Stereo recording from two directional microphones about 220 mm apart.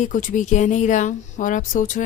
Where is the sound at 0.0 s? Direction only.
35° left (ahead or behind).